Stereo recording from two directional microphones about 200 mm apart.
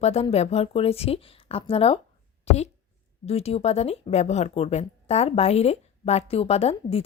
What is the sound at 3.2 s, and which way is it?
A woman's voice, 30° left (ahead or behind).